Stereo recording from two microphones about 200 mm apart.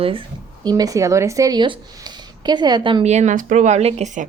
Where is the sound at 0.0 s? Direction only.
25° right (ahead or behind).